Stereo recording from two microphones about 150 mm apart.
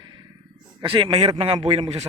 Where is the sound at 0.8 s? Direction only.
35° right (ahead or behind).